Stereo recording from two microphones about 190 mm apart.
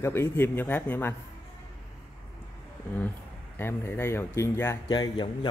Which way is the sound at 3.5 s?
10° left (ahead or behind).